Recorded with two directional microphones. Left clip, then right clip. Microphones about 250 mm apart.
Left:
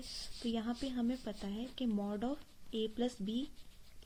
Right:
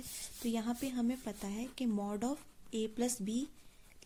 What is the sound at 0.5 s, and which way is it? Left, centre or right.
Speech, right.